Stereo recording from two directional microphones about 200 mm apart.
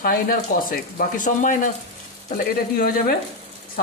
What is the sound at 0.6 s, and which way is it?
Speech, 40° left (ahead or behind).